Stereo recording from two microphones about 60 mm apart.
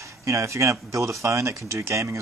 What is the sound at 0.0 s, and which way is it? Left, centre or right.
Speech, right.